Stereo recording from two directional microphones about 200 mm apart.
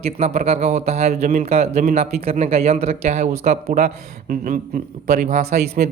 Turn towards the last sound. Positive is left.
turn(degrees=-40)  # may be behind; listen again after turning